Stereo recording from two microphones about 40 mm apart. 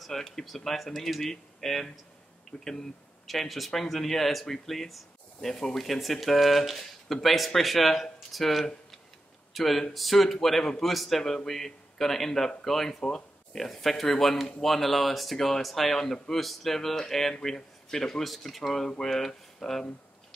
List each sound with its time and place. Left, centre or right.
0.0 s a man's voice: centre
2.5 s speech: left
3.3 s a man's voice: centre
18.2 s a man's voice: centre